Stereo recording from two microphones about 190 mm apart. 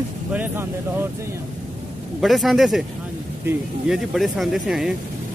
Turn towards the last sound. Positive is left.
turn(degrees=0)  # may be behind; listen again after turning